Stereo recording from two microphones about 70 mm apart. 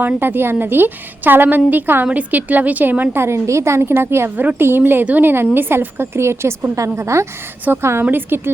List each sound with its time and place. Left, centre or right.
0.0 s a woman's voice: right
7.6 s a woman's voice: right